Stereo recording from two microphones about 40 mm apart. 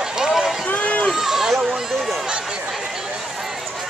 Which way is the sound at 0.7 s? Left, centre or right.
Left.